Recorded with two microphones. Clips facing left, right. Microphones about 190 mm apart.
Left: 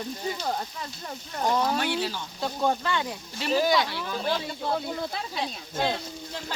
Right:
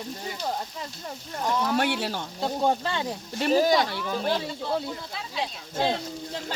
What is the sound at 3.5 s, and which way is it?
Speech, 40° right (ahead or behind).